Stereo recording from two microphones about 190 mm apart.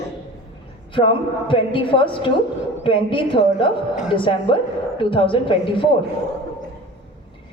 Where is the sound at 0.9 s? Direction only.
25° left (ahead or behind).